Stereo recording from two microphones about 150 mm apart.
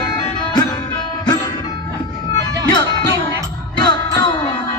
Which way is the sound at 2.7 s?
30° left (ahead or behind).